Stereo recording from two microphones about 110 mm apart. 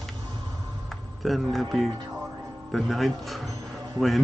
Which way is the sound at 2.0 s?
30° right (ahead or behind).